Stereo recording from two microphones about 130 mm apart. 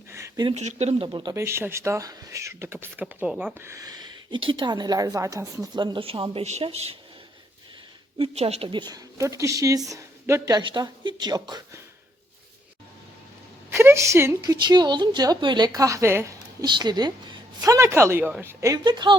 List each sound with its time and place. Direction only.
0.5 s speech: 55° right (ahead or behind)
1.0 s a woman's voice: 35° right (ahead or behind)
1.4 s a woman's voice: 20° right (ahead or behind)
3.6 s a woman's voice: 25° right (ahead or behind)
5.8 s a woman's voice: 40° right (ahead or behind)
6.4 s a woman's voice: 55° right (ahead or behind)
8.2 s a woman's voice: 55° right (ahead or behind)
8.9 s a woman's voice: 25° right (ahead or behind)
10.6 s a woman's voice: 35° right (ahead or behind)
13.7 s a woman's voice: 20° right (ahead or behind)
16.6 s a woman's voice: 35° right (ahead or behind); by 18.5 s 15° right (ahead or behind)
18.6 s a woman's voice: 30° right (ahead or behind)